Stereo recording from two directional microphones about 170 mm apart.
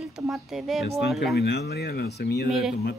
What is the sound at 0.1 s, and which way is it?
Speech, centre (ahead or behind).